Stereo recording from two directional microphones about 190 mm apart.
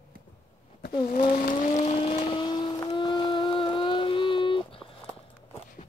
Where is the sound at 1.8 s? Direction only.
30° left (ahead or behind).